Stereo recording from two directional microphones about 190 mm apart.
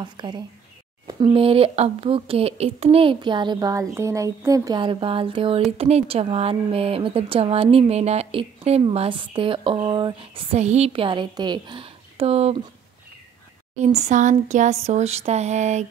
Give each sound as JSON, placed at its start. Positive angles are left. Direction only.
{"t": 0.0, "sound": "a woman's voice", "side_deg": -25}
{"t": 13.7, "sound": "speech", "side_deg": -35}